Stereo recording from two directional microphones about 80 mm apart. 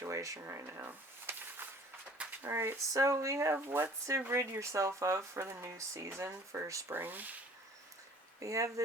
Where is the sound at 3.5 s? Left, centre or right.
Right.